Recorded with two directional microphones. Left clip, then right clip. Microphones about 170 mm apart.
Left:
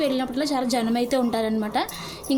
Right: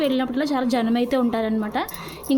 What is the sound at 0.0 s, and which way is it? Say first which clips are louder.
A woman's voice: right 2 dB; 10° right (ahead or behind).